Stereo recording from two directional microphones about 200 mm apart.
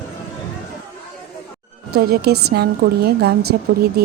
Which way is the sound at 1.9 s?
55° right (ahead or behind).